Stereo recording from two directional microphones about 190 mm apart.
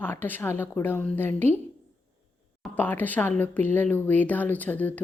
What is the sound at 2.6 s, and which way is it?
A woman's voice, 10° left (ahead or behind).